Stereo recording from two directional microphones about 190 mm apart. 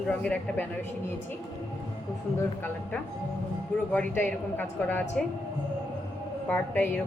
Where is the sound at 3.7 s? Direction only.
10° left (ahead or behind).